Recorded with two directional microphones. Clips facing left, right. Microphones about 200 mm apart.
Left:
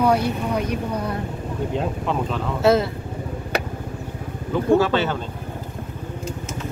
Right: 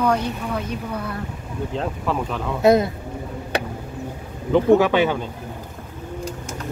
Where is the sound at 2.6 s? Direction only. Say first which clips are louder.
Right 2 dB; 15° right (ahead or behind).